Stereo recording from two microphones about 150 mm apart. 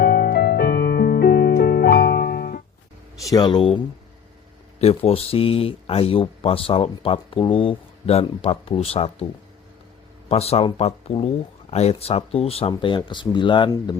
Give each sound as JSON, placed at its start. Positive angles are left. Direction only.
{"t": 0.0, "sound": "music", "side_deg": 90}
{"t": 3.2, "sound": "speech", "side_deg": 25}
{"t": 4.8, "sound": "speech", "side_deg": 45}
{"t": 10.2, "sound": "speech", "side_deg": 45}
{"t": 12.7, "sound": "speech", "side_deg": 30}